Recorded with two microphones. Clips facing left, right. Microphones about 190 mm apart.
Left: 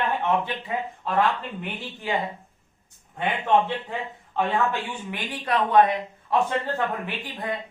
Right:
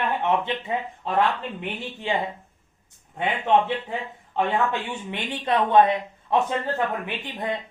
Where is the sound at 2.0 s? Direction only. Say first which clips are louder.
Right 1 dB; 25° right (ahead or behind).